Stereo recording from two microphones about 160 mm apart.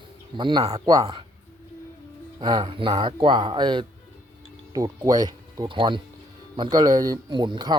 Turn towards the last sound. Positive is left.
turn(degrees=-25)  # may be behind; listen again after turning